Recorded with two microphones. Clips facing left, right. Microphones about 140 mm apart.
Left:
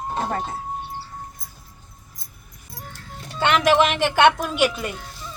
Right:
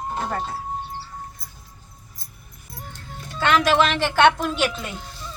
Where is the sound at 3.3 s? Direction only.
20° left (ahead or behind).